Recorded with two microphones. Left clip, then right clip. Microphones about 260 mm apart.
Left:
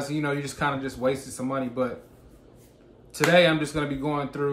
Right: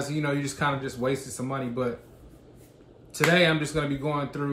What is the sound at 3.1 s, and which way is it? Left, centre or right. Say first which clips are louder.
Speech: left 2 dB; centre.